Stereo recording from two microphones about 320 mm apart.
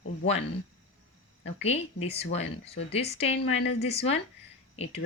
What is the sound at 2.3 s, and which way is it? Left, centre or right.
A woman's voice, centre.